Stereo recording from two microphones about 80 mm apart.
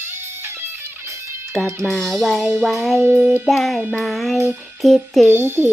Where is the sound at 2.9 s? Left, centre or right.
Right.